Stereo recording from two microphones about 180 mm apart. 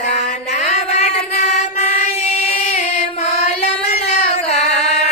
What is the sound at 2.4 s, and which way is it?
Child singing, 40° left (ahead or behind).